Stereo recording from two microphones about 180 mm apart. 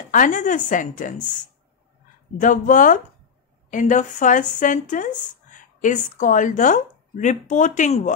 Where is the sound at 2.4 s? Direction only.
45° left (ahead or behind).